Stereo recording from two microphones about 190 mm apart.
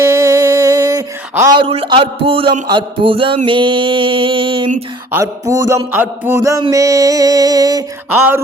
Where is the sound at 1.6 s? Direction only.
30° right (ahead or behind).